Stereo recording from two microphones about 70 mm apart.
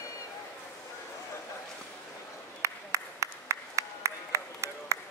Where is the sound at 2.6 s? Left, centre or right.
Right.